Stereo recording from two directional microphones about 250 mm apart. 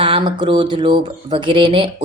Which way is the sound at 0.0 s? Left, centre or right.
Right.